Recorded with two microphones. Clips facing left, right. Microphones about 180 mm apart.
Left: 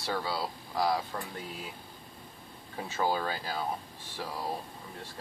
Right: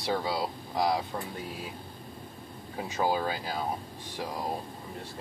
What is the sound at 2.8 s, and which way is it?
Speech, 15° right (ahead or behind).